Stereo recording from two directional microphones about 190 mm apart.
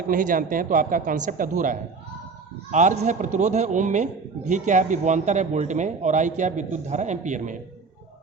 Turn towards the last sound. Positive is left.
turn(degrees=-40)  # may be behind; listen again after turning